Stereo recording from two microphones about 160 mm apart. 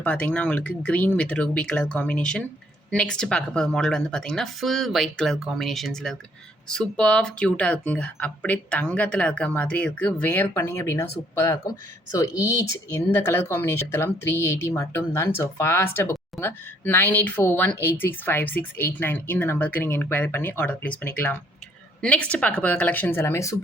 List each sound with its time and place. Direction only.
0.0 s speech: 10° left (ahead or behind)